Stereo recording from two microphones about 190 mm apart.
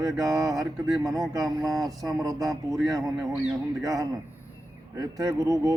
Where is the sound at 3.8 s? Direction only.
20° right (ahead or behind).